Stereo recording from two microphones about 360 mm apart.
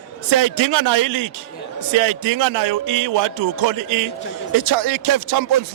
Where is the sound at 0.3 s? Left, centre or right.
Right.